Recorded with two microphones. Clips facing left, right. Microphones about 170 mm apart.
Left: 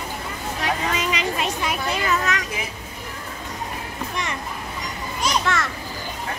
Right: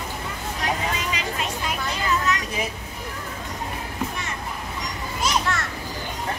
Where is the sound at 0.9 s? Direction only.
80° left.